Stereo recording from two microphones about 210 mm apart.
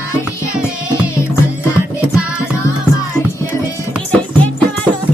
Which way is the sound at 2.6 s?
15° left (ahead or behind).